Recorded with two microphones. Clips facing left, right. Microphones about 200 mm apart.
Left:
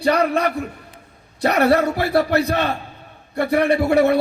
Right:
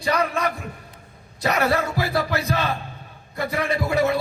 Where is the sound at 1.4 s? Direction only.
65° left (ahead or behind).